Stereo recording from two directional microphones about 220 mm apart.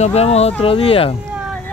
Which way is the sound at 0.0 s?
30° left (ahead or behind).